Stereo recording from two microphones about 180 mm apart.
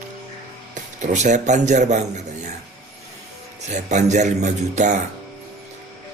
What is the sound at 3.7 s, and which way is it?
Speech, 40° right (ahead or behind).